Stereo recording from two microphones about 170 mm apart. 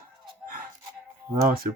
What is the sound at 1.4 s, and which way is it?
Speech, 60° right (ahead or behind).